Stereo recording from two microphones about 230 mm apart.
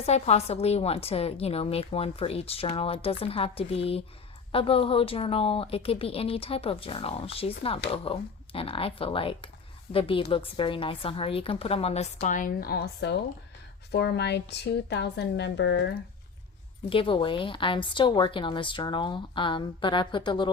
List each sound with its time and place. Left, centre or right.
0.0 s a woman's voice: left
16.9 s a woman's voice: left